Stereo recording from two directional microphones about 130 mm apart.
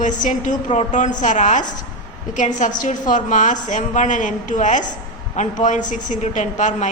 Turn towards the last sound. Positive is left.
turn(degrees=70)  # may be behind; listen again after turning